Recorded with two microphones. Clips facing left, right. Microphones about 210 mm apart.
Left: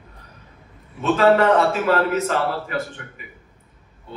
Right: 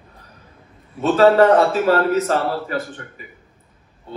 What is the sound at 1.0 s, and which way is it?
A man's voice, 35° right (ahead or behind).